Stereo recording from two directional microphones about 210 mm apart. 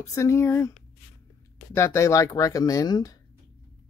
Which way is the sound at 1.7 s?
15° left (ahead or behind).